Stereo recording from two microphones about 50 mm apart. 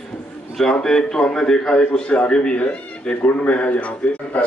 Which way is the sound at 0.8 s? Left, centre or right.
Centre.